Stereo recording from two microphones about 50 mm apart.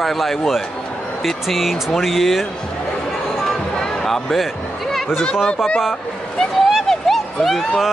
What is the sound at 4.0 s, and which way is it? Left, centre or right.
Speech, centre.